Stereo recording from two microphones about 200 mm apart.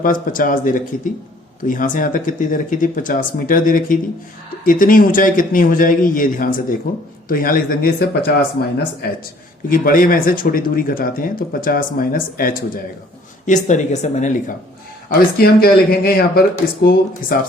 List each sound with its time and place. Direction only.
0.0 s speech: 45° left (ahead or behind)
9.6 s speech: 45° left (ahead or behind)